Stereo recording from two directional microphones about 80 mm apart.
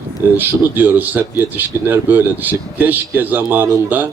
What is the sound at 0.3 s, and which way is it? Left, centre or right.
Speech, right.